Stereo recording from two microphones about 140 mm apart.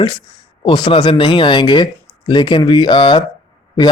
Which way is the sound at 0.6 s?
35° left (ahead or behind).